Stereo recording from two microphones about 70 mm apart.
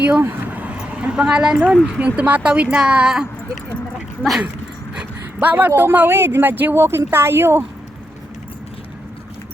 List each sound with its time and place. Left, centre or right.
0.2 s vehicle: right
0.8 s speech: centre
2.0 s speech: centre
5.4 s speech: right